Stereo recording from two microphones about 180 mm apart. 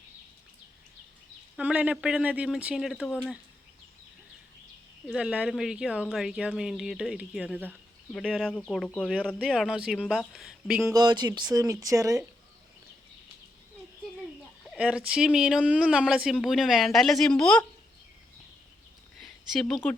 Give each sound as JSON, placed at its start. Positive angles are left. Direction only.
{"t": 1.5, "sound": "speech", "side_deg": -5}
{"t": 5.0, "sound": "speech", "side_deg": -5}
{"t": 10.9, "sound": "speech", "side_deg": -25}
{"t": 14.7, "sound": "speech", "side_deg": -5}
{"t": 19.2, "sound": "a sound", "side_deg": 0}